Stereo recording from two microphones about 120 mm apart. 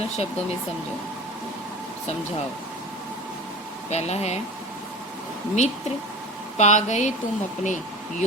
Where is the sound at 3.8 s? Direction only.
65° left (ahead or behind).